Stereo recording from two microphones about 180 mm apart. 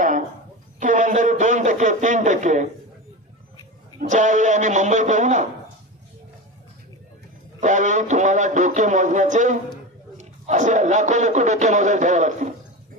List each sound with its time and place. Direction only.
0.7 s a sound: 45° right (ahead or behind)
4.1 s a man's voice: 45° right (ahead or behind)
7.6 s a man's voice: 45° right (ahead or behind)